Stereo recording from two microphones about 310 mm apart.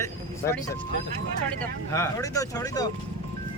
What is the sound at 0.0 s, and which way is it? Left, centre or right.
Vehicle, centre.